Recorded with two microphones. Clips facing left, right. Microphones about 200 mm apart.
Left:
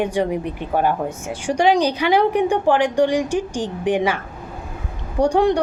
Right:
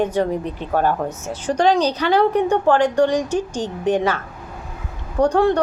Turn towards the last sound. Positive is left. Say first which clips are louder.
# even
turn(degrees=15)  # may be behind; listen again after turning